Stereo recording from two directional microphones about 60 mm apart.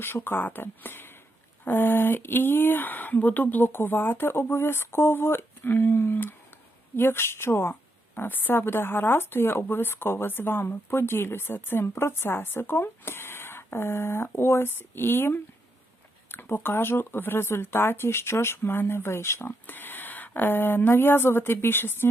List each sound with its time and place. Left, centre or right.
0.0 s a woman's voice: left